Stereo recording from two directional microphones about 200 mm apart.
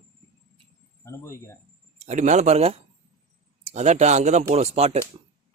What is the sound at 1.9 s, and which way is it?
Speech, 35° right (ahead or behind).